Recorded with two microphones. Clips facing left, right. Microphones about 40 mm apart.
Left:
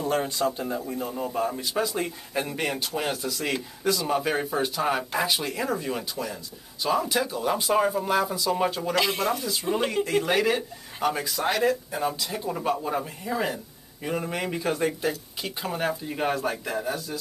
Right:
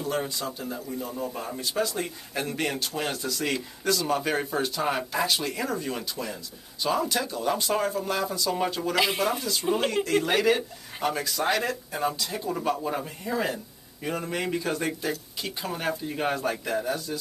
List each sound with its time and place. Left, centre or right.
0.2 s a man's voice: left
1.3 s speech: centre
8.9 s speech: centre
10.1 s a man's voice: centre
16.2 s a man's voice: centre